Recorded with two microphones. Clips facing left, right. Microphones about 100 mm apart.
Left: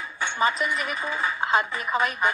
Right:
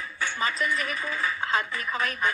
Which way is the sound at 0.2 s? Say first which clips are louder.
Left 4 dB; 20° left (ahead or behind).